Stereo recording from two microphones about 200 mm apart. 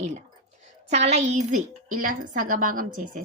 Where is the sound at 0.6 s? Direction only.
35° right (ahead or behind).